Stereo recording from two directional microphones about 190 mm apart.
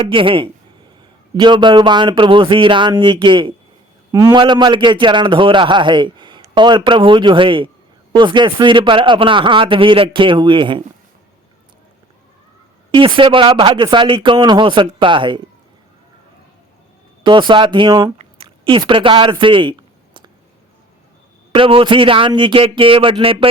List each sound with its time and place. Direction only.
0.0 s a man's voice: 25° right (ahead or behind)
12.9 s a man's voice: 25° right (ahead or behind)
17.2 s a man's voice: 25° right (ahead or behind)
18.4 s a sound: 25° right (ahead or behind)
21.5 s a man's voice: 30° right (ahead or behind)